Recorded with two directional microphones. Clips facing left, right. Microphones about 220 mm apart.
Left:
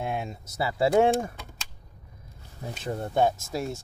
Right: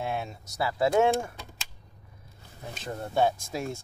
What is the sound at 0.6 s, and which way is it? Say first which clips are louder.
Speech: left 2 dB; 25° left (ahead or behind).